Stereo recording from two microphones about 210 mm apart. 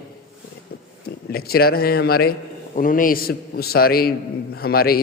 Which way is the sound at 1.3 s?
45° left (ahead or behind).